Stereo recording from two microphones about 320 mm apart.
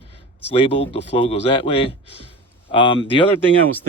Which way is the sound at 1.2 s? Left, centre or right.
Centre.